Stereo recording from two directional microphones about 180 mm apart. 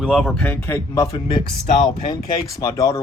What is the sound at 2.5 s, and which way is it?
Speech, 20° left (ahead or behind).